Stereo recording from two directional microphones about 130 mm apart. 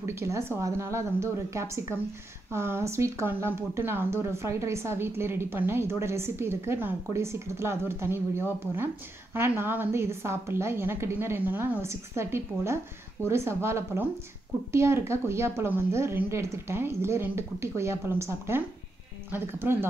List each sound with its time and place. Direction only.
0.0 s speech: 20° right (ahead or behind)